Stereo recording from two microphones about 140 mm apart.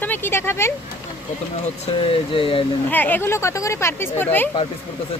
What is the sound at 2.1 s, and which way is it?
Speech, 40° left (ahead or behind).